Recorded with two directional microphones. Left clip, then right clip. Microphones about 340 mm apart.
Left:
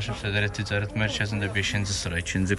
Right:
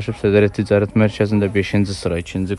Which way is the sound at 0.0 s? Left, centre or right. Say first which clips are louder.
Right 12 dB; centre.